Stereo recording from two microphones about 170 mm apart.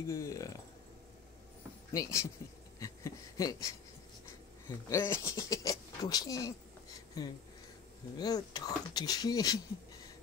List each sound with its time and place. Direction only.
0.1 s speech: 20° left (ahead or behind)
1.9 s speech: 15° left (ahead or behind)